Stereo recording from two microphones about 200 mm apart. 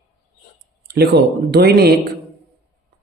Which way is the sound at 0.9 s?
55° right (ahead or behind).